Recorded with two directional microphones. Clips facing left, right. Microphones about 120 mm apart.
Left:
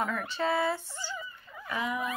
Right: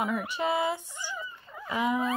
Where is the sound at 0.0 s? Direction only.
15° right (ahead or behind).